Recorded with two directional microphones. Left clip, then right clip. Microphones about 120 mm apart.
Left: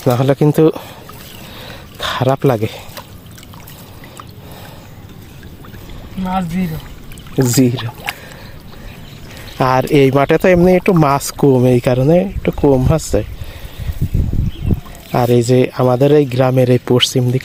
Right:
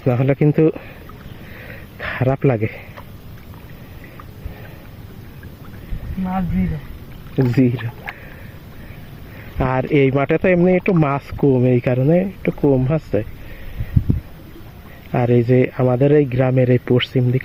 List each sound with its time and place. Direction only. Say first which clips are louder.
0.0 s speech: left 4 dB; 25° left (ahead or behind)
2.0 s speech: left 5 dB; 25° left (ahead or behind)
6.2 s speech: left 5 dB; 25° left (ahead or behind)
9.6 s speech: left 5 dB; 35° left (ahead or behind)
15.1 s speech: left 4 dB; 25° left (ahead or behind)